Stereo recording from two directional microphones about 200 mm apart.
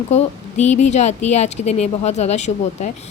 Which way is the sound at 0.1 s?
35° left (ahead or behind).